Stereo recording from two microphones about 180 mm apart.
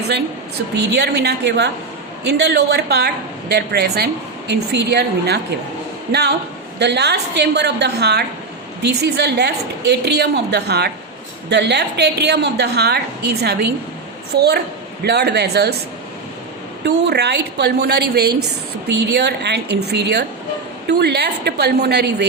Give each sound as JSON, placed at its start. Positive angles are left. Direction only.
{"t": 0.9, "sound": "a woman's voice", "side_deg": -65}
{"t": 16.8, "sound": "a woman's voice", "side_deg": -70}